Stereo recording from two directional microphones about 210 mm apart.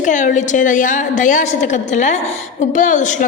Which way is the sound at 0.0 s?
35° left (ahead or behind).